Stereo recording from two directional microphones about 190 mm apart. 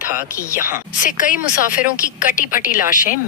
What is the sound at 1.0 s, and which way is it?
Speech, 45° left (ahead or behind).